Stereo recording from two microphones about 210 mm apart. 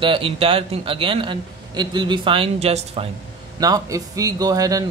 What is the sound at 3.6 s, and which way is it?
Speech, 15° right (ahead or behind).